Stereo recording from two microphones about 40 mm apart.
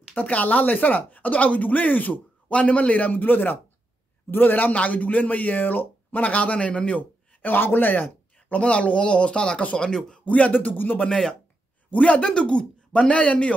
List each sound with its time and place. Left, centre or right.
0.1 s speech: left
2.5 s a man's voice: left
4.7 s speech: left
7.0 s speech: left
8.5 s a man's voice: left
10.2 s speech: left
11.1 s speech: centre
11.9 s a man's voice: left
12.2 s speech: left